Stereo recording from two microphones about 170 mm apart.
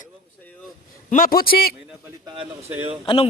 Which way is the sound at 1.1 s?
55° left (ahead or behind).